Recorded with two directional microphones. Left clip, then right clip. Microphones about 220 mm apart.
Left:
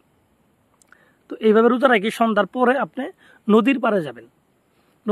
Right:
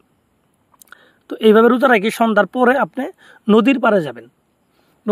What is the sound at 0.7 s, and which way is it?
Speech, 35° right (ahead or behind).